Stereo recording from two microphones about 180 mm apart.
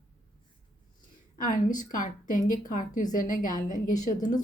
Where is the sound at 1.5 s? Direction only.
45° left (ahead or behind).